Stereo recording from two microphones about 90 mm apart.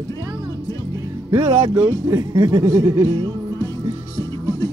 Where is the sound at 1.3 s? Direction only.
90° right.